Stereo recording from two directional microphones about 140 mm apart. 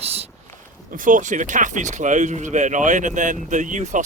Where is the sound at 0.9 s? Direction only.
70° right (ahead or behind).